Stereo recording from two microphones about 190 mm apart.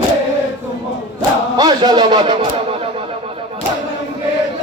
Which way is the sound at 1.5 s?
20° right (ahead or behind).